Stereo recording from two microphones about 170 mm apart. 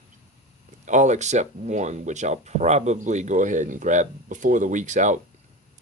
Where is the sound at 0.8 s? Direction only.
45° right (ahead or behind).